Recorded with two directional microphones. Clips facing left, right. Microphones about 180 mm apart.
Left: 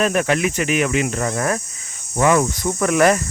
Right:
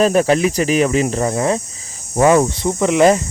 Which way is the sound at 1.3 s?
20° right (ahead or behind).